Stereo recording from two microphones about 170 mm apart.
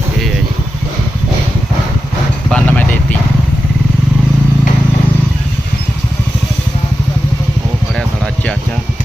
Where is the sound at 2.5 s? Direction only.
10° left (ahead or behind).